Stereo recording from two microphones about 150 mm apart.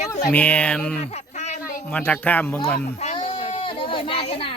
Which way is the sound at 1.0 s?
45° left (ahead or behind).